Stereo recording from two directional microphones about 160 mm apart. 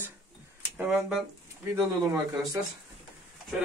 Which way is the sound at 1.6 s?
15° right (ahead or behind).